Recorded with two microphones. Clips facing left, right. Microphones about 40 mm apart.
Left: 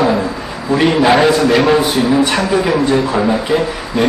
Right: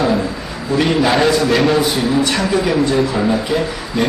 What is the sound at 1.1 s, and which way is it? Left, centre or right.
A man's voice, centre.